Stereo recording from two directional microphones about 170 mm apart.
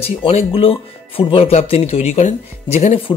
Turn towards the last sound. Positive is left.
turn(degrees=35)  # may be behind; listen again after turning